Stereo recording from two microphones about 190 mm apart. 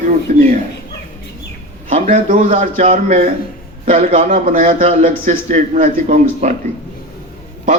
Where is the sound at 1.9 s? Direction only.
40° right (ahead or behind).